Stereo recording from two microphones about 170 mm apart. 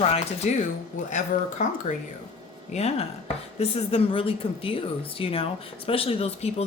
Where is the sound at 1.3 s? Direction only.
55° left (ahead or behind); by 6.6 s 35° left (ahead or behind).